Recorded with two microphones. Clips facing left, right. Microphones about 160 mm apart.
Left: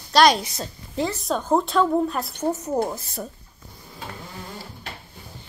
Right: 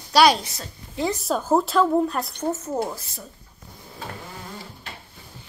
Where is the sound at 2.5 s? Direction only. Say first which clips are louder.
Left 2 dB; 15° left (ahead or behind).